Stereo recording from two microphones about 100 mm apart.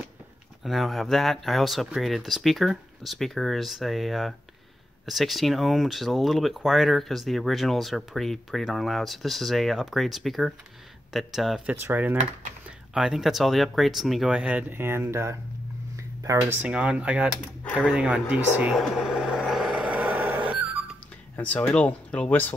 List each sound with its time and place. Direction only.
0.7 s speech: centre (ahead or behind)
11.6 s speech: 20° right (ahead or behind)
12.9 s speech: 5° right (ahead or behind); by 15.3 s 25° right (ahead or behind)
16.0 s a sound: 35° right (ahead or behind)
16.6 s speech: 10° right (ahead or behind)
18.6 s a sound: 5° right (ahead or behind)
21.4 s speech: 15° left (ahead or behind)